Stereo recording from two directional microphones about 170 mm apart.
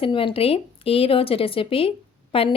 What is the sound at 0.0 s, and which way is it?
Speech, 30° left (ahead or behind).